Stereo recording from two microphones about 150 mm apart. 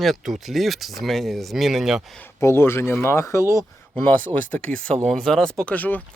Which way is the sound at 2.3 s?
15° left (ahead or behind).